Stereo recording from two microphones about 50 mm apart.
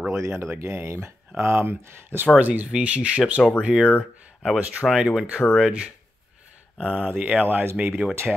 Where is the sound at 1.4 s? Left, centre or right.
Right.